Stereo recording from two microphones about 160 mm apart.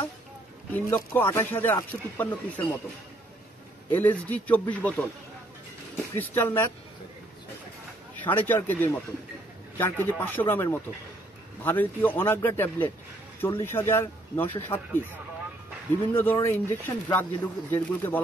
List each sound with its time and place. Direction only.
0.7 s speech: 15° left (ahead or behind)
3.9 s speech: 10° left (ahead or behind)
6.1 s speech: 10° left (ahead or behind)
8.2 s speech: 10° left (ahead or behind)
16.1 s speech: 15° left (ahead or behind)